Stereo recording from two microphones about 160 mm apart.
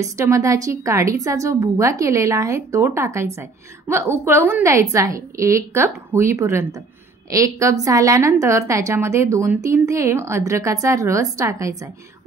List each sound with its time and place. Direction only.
0.0 s a woman's voice: 20° right (ahead or behind)